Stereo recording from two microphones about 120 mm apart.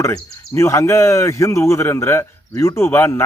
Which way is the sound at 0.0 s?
25° left (ahead or behind).